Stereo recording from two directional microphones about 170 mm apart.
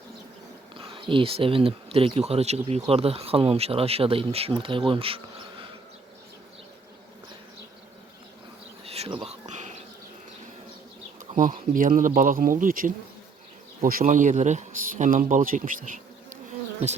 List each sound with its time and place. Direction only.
0.8 s speech: 35° right (ahead or behind)
8.8 s insect: 35° right (ahead or behind)
11.3 s speech: 50° right (ahead or behind)